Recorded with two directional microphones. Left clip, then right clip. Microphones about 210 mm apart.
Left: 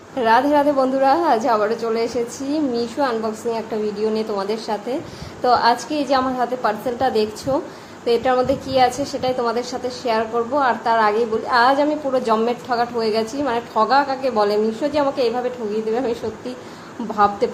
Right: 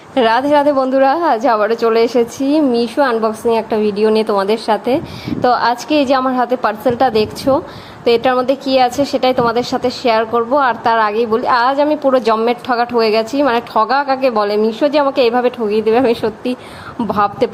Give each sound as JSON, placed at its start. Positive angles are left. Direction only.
{"t": 0.1, "sound": "a woman's voice", "side_deg": -30}